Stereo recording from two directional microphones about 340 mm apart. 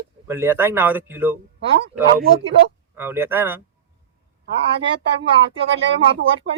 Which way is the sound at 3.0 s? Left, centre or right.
Centre.